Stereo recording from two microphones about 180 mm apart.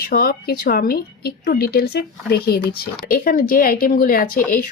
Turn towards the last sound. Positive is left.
turn(degrees=50)  # may be behind; listen again after turning